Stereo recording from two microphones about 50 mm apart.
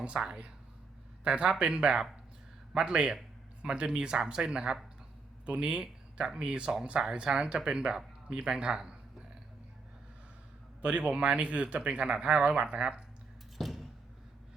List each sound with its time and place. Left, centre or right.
1.2 s speech: right
10.8 s speech: right
13.6 s a sound: centre